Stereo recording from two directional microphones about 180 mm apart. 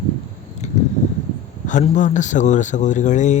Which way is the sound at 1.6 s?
45° left (ahead or behind).